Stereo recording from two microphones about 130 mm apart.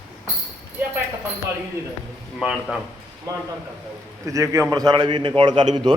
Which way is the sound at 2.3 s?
5° right (ahead or behind).